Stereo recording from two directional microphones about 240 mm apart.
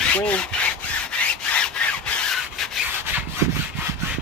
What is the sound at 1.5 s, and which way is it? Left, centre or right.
Wood, centre.